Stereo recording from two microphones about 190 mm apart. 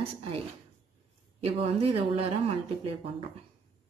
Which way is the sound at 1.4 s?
30° right (ahead or behind).